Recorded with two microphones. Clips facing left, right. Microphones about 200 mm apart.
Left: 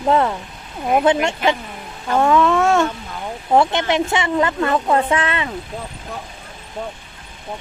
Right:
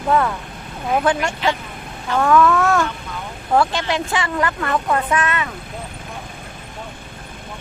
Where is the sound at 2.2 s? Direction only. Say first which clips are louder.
Even; 25° left (ahead or behind).